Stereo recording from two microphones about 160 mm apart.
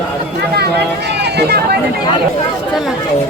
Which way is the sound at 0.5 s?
90° right.